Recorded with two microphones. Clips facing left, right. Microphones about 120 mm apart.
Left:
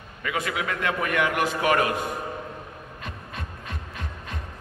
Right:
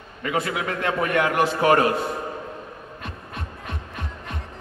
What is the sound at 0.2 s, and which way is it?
A man's voice, 35° right (ahead or behind).